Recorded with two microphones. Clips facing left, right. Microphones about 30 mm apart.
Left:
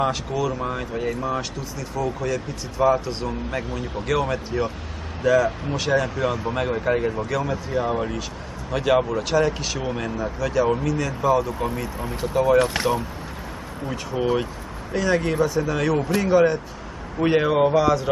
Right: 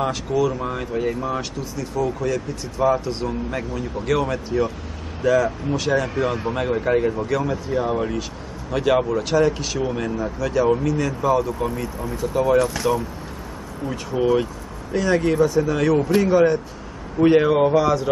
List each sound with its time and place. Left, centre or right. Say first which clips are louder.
0.0 s speech: right 2 dB; centre
12.5 s speech: even; left
14.2 s speech: right 4 dB; centre